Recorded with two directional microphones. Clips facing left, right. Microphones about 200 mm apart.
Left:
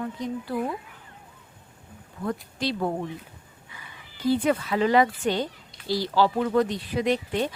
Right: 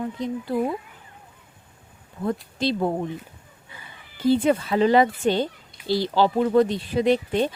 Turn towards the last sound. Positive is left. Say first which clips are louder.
# right 4 dB
turn(degrees=-30)  # may be behind; listen again after turning